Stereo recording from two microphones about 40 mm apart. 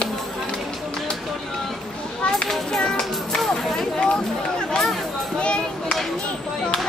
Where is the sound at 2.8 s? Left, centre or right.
Centre.